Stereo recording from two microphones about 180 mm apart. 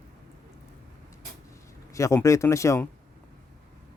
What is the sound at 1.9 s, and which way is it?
Speech, 15° left (ahead or behind).